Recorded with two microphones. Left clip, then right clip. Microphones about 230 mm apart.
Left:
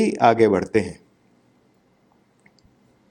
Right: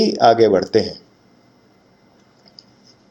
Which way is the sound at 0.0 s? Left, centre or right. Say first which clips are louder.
Right 4 dB; left.